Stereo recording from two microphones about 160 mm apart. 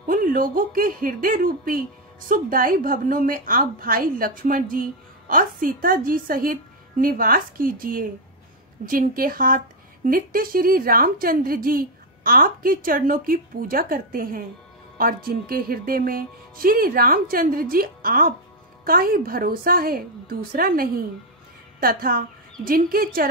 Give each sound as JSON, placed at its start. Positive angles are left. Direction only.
{"t": 0.0, "sound": "a woman's voice", "side_deg": -60}